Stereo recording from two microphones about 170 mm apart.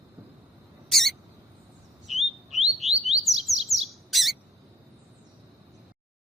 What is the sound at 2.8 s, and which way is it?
Bird, centre (ahead or behind).